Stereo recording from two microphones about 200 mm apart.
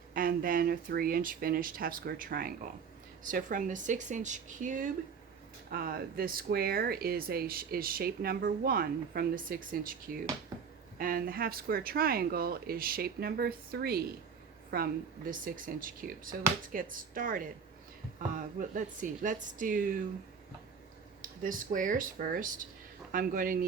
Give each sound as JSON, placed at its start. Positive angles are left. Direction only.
{"t": 0.1, "sound": "a woman's voice", "side_deg": -45}
{"t": 10.5, "sound": "a sound", "side_deg": -15}
{"t": 10.9, "sound": "a woman's voice", "side_deg": -45}
{"t": 21.2, "sound": "speech", "side_deg": -40}